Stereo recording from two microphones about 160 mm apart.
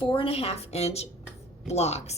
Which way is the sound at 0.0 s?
35° left (ahead or behind).